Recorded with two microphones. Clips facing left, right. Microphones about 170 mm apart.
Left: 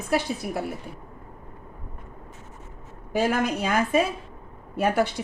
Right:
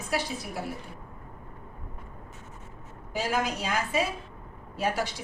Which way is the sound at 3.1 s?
60° left (ahead or behind).